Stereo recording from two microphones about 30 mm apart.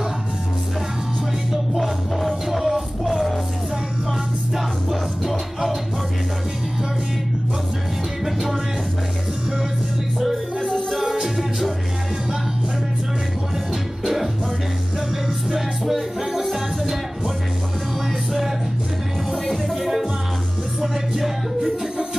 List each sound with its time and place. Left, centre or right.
1.8 s music: centre
8.3 s music: centre
10.1 s music: centre
11.0 s music: centre
11.2 s music: centre
14.0 s music: centre
16.2 s music: centre
19.3 s music: centre
19.7 s music: centre
21.1 s music: centre